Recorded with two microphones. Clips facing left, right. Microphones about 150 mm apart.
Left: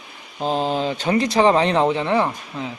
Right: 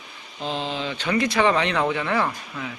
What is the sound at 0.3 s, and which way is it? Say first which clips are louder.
Speech: left 7 dB; 45° left (ahead or behind).